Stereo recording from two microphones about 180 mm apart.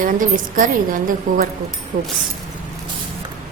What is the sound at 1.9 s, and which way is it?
Speech, 50° right (ahead or behind).